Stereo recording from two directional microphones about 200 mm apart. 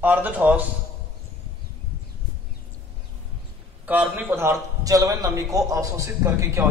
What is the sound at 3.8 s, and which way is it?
A man's voice, 10° right (ahead or behind).